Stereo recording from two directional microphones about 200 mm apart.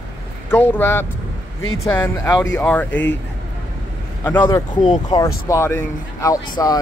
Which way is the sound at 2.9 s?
65° left (ahead or behind).